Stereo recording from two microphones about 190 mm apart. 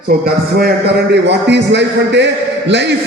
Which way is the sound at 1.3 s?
65° right (ahead or behind).